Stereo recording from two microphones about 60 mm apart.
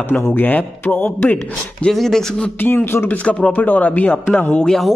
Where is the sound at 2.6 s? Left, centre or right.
Left.